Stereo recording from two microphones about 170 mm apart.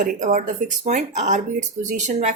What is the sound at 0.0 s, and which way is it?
Speech, 45° right (ahead or behind).